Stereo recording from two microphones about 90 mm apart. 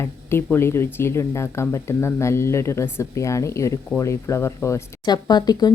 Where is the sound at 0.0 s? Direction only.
25° left (ahead or behind).